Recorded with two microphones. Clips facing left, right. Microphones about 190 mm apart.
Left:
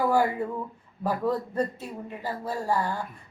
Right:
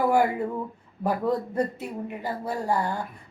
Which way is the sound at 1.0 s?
15° right (ahead or behind).